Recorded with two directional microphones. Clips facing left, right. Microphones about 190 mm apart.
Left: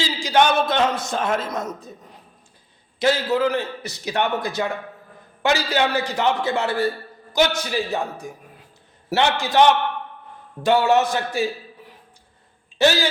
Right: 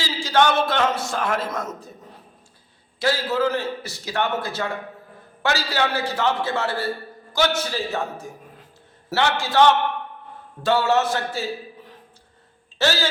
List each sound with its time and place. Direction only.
0.0 s a man's voice: 15° left (ahead or behind)
3.0 s a man's voice: 20° left (ahead or behind)
12.8 s a man's voice: 15° left (ahead or behind)